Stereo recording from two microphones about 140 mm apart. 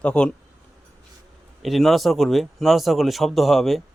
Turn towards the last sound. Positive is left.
turn(degrees=0)  # may be behind; listen again after turning